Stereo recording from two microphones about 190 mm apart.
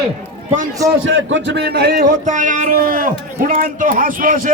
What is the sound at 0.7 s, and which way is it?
Speech, 15° right (ahead or behind).